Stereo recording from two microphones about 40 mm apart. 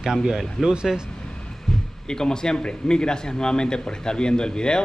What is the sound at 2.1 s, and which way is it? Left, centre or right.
Speech, centre.